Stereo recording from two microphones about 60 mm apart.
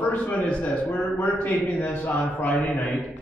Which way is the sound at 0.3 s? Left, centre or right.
Left.